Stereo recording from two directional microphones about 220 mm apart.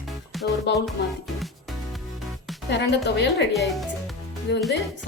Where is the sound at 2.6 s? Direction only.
50° left (ahead or behind).